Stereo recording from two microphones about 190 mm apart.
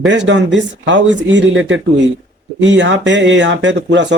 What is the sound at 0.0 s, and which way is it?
Speech, 70° right (ahead or behind).